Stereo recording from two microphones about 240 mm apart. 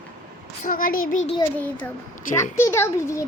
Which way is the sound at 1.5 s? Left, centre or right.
Centre.